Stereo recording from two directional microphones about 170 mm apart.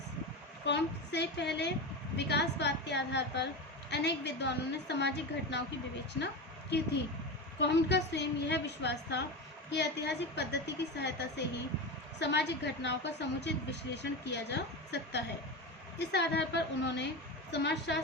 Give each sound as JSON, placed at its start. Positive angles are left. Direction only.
{"t": 0.6, "sound": "a woman's voice", "side_deg": 90}
{"t": 7.6, "sound": "a woman's voice", "side_deg": 90}